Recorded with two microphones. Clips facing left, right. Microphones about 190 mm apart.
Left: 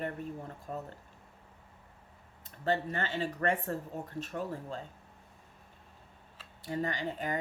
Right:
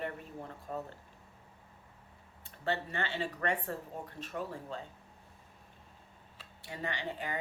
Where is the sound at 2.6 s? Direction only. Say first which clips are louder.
Left 3 dB; 40° left (ahead or behind).